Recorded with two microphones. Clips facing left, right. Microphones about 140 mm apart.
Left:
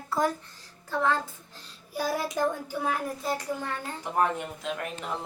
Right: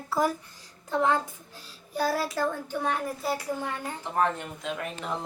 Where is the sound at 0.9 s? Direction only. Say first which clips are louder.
Right 2 dB; 20° right (ahead or behind).